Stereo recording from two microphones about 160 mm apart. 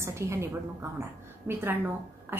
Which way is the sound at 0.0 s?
15° right (ahead or behind).